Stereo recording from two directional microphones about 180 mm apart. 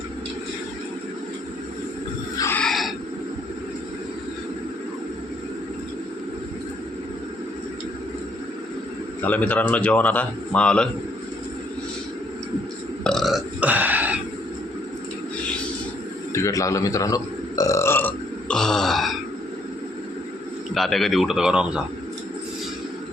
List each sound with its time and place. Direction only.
2.4 s wild animals: 10° left (ahead or behind)
9.2 s a man's voice: 10° left (ahead or behind)
13.1 s burping: centre (ahead or behind)
16.3 s a man's voice: 15° left (ahead or behind)
17.6 s burping: 15° left (ahead or behind); by 19.1 s centre (ahead or behind)
20.7 s a man's voice: centre (ahead or behind)